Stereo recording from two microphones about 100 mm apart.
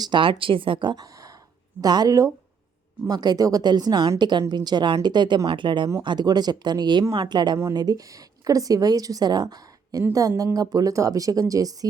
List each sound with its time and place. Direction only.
0.0 s a woman's voice: 55° right (ahead or behind); by 11.9 s 35° right (ahead or behind)